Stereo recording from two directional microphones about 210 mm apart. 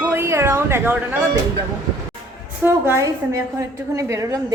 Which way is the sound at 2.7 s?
10° right (ahead or behind).